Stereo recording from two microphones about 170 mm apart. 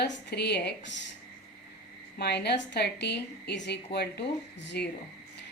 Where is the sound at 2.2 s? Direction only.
75° left (ahead or behind).